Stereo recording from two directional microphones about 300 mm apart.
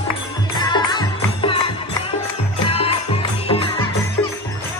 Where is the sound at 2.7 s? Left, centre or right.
Centre.